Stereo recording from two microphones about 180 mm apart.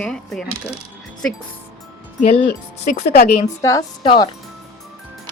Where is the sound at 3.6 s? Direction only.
20° left (ahead or behind).